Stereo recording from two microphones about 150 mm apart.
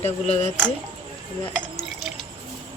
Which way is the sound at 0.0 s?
45° left (ahead or behind).